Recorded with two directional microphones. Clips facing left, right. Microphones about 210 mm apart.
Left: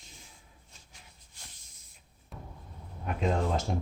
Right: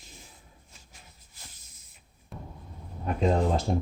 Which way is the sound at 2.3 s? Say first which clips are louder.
Right 4 dB; centre (ahead or behind).